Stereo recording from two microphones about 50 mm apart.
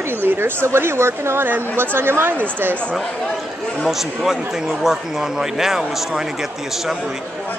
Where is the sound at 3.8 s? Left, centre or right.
Centre.